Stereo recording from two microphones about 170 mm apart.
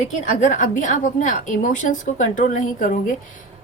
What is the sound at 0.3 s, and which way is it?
A woman's voice, 45° left (ahead or behind).